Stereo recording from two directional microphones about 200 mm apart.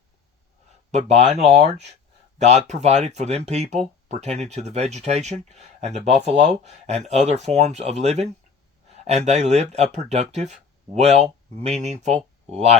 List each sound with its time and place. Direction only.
0.9 s speech: 35° right (ahead or behind)